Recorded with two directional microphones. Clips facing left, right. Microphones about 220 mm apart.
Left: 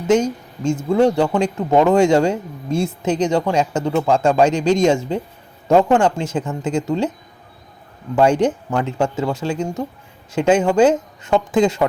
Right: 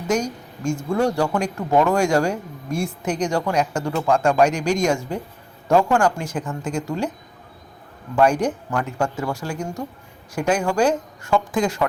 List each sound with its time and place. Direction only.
0.1 s speech: 25° left (ahead or behind)
8.1 s speech: 25° left (ahead or behind)